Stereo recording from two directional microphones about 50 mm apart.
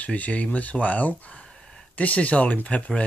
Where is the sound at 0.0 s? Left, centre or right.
Left.